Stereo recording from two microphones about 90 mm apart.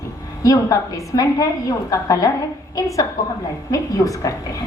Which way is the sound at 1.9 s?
40° left (ahead or behind).